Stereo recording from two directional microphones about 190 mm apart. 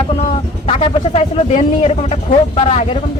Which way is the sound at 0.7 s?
30° left (ahead or behind).